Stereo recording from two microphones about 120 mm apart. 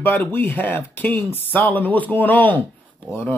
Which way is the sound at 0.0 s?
20° left (ahead or behind).